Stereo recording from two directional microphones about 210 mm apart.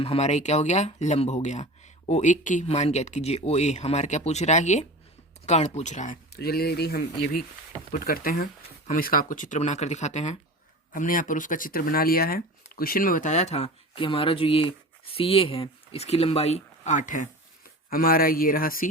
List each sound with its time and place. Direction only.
0.0 s speech: 30° left (ahead or behind)
6.3 s speech: 45° left (ahead or behind)